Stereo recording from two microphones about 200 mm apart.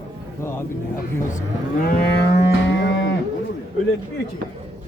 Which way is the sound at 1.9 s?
55° left (ahead or behind).